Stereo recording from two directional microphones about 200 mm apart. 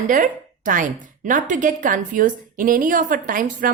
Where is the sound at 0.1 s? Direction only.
40° right (ahead or behind).